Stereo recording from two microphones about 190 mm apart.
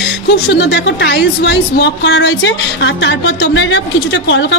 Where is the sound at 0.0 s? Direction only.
65° left (ahead or behind).